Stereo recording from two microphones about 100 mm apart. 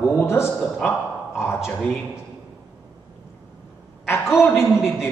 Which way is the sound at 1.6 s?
5° right (ahead or behind).